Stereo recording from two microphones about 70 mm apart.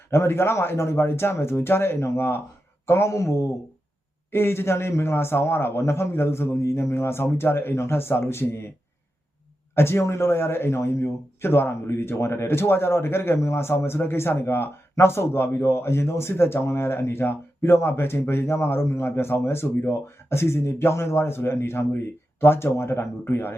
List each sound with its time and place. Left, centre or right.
0.1 s speech: left
9.7 s speech: left